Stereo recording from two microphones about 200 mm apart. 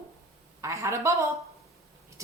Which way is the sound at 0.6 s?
15° right (ahead or behind).